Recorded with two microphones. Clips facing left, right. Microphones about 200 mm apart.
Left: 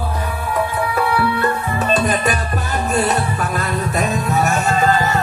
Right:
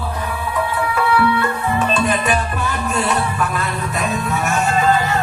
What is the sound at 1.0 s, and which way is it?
Music, 40° left (ahead or behind).